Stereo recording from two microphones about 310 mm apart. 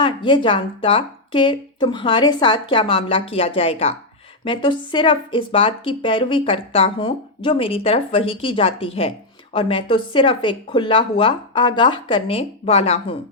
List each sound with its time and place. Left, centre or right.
0.0 s a woman's voice: centre